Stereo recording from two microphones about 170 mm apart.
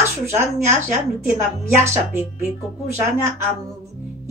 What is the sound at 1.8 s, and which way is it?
Speech, 15° right (ahead or behind).